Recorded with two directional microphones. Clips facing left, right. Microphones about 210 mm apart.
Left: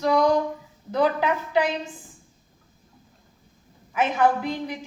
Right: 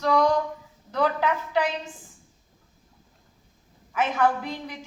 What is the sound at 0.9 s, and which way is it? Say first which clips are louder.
Speech: left 2 dB; 10° left (ahead or behind).